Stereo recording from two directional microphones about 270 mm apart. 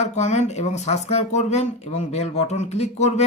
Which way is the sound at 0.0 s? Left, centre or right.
Left.